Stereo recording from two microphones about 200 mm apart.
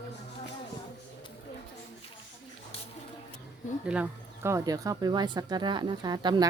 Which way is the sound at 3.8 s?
5° right (ahead or behind).